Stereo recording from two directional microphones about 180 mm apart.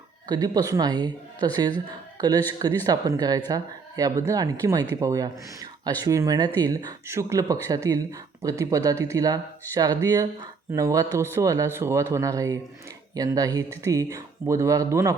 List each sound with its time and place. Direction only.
0.3 s speech: 20° right (ahead or behind)